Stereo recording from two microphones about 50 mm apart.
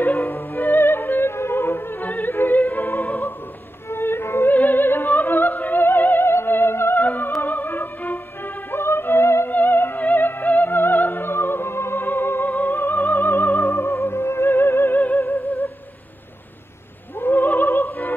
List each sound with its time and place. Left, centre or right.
0.0 s music: left
2.0 s opera: left
2.9 s music: left
3.9 s music: left
4.5 s opera: left
7.0 s music: left
8.7 s music: left
9.5 s theremin: left
9.9 s music: left
15.0 s music: left
17.2 s music: left